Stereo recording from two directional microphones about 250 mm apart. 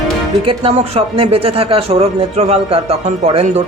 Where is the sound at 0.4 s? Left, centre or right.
Right.